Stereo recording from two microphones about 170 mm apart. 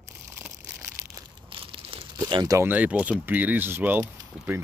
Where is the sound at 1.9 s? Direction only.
25° right (ahead or behind).